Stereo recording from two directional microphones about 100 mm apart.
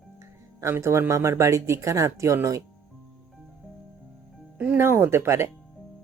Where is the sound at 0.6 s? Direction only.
25° right (ahead or behind).